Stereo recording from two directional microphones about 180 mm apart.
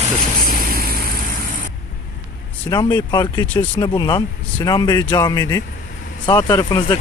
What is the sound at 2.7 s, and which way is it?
Speech, 20° left (ahead or behind).